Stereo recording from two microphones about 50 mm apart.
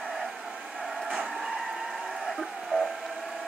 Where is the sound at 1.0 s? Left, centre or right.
Centre.